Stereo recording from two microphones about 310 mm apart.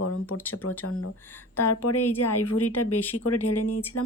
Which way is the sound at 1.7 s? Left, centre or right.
Left.